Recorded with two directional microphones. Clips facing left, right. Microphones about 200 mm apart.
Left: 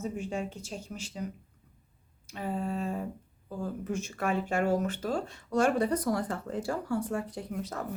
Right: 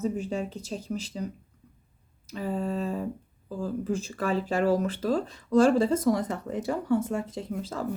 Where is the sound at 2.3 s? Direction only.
40° right (ahead or behind).